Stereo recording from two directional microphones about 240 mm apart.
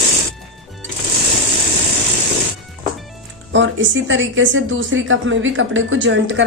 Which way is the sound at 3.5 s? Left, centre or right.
Right.